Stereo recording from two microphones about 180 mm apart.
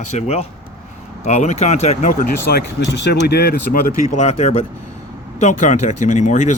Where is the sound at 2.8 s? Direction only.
75° left (ahead or behind); by 4.2 s 55° left (ahead or behind).